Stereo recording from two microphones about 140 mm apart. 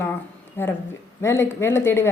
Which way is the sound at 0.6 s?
15° left (ahead or behind).